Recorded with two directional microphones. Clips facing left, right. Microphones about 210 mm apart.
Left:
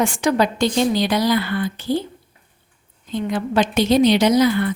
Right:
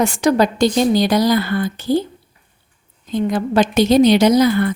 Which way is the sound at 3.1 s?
40° right (ahead or behind).